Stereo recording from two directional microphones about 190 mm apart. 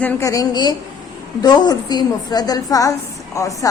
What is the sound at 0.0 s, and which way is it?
A woman's voice, 10° left (ahead or behind).